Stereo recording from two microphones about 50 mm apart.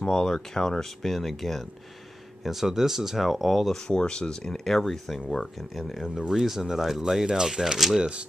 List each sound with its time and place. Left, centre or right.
0.0 s speech: centre
3.7 s speech: centre
8.0 s speech: right